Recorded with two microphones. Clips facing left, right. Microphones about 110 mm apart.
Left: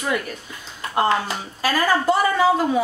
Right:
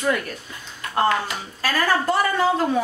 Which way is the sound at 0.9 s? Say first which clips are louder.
Left 1 dB; 25° left (ahead or behind).